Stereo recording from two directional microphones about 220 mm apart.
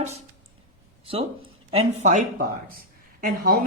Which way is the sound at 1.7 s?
30° right (ahead or behind).